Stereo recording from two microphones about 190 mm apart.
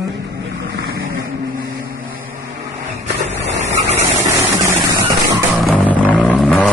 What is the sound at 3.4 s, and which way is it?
Vehicle, 75° right (ahead or behind).